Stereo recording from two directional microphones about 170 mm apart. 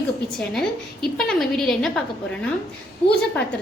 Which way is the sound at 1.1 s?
5° left (ahead or behind).